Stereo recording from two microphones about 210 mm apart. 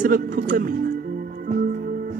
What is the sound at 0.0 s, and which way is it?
Speech, 40° right (ahead or behind).